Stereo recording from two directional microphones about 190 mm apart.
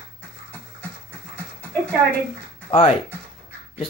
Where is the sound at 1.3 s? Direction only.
5° left (ahead or behind).